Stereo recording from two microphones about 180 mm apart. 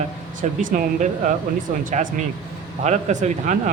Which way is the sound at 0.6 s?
45° right (ahead or behind).